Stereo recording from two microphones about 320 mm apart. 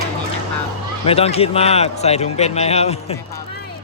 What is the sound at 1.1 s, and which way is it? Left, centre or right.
A man's voice, centre.